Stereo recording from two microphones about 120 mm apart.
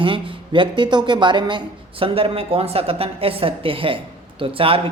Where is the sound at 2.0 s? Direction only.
50° right (ahead or behind).